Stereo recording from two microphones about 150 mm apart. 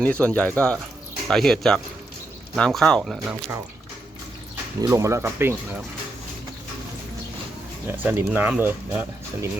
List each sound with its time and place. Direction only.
0.0 s speech: 10° left (ahead or behind)
4.8 s speech: 20° right (ahead or behind)
7.9 s speech: 15° right (ahead or behind)